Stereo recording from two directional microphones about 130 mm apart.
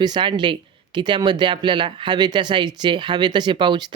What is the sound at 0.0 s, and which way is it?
Speech, 35° right (ahead or behind).